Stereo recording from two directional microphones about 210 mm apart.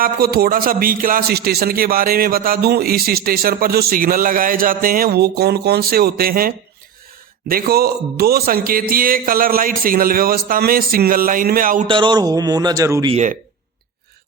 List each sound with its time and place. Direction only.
0.0 s a man's voice: 45° right (ahead or behind)
11.9 s a man's voice: 20° right (ahead or behind)